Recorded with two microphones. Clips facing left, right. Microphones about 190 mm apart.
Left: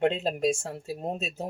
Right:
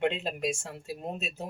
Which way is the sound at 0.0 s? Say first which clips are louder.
Left 4 dB; 40° left (ahead or behind).